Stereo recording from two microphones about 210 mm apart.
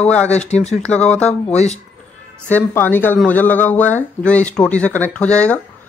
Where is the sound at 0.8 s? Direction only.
5° left (ahead or behind).